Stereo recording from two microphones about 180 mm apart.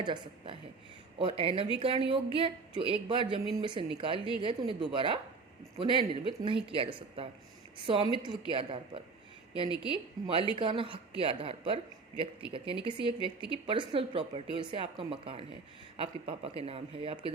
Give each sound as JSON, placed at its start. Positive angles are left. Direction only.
{"t": 0.0, "sound": "speech", "side_deg": -25}
{"t": 9.8, "sound": "speech", "side_deg": -30}